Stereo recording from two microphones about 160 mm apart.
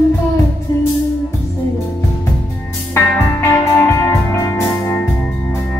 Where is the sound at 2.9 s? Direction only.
15° left (ahead or behind).